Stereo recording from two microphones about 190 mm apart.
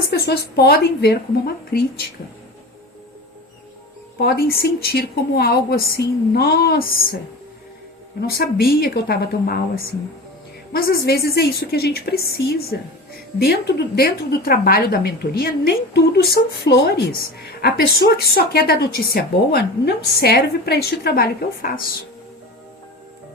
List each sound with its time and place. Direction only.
0.1 s a woman's voice: 60° left (ahead or behind)
4.2 s a woman's voice: 55° left (ahead or behind)
8.4 s a woman's voice: 55° left (ahead or behind)